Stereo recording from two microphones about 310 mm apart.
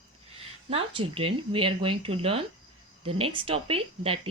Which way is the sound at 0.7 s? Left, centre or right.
Centre.